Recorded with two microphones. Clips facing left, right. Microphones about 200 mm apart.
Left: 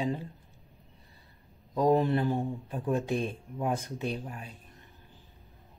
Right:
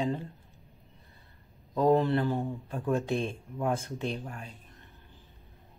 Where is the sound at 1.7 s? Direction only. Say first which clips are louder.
Right 1 dB; 15° left (ahead or behind).